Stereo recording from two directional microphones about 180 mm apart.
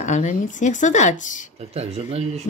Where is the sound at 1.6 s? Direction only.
35° right (ahead or behind).